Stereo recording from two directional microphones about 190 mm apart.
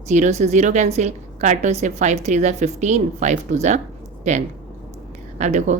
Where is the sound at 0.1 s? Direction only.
35° right (ahead or behind).